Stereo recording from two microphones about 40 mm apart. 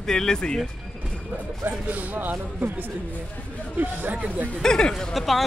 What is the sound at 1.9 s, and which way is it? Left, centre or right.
Speech, right.